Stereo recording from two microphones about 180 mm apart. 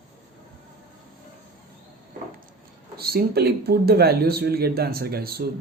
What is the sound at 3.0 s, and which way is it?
Speech, 60° right (ahead or behind).